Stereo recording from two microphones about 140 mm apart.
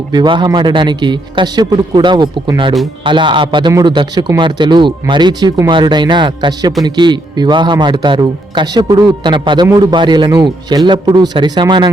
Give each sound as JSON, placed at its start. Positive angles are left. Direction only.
{"t": 0.1, "sound": "a man's voice", "side_deg": -30}